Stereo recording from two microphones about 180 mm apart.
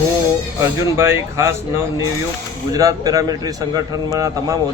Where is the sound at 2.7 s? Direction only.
20° right (ahead or behind).